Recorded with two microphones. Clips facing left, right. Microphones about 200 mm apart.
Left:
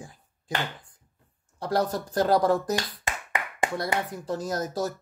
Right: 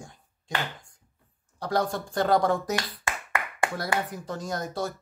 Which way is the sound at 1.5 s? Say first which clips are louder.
Left 1 dB; centre (ahead or behind).